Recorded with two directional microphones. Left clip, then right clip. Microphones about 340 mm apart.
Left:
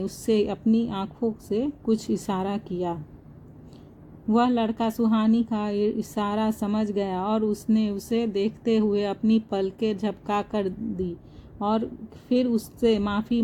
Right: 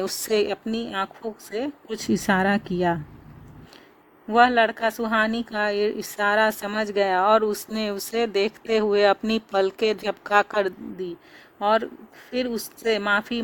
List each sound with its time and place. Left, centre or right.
0.0 s speech: right
4.3 s speech: right
12.4 s speech: right